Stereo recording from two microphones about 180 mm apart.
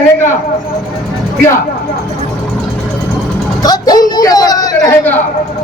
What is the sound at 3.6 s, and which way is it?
Speech, 20° left (ahead or behind).